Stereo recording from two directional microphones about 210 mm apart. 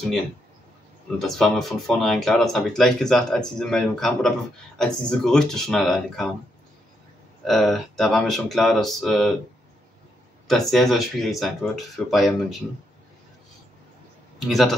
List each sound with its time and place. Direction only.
1.1 s speech: centre (ahead or behind)
7.4 s speech: centre (ahead or behind)
10.7 s speech: centre (ahead or behind)
14.5 s speech: centre (ahead or behind)